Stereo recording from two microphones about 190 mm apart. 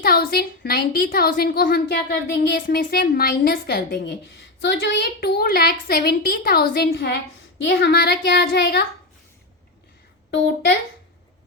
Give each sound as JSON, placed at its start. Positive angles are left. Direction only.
{"t": 0.0, "sound": "a woman's voice", "side_deg": 55}
{"t": 10.3, "sound": "a woman's voice", "side_deg": 60}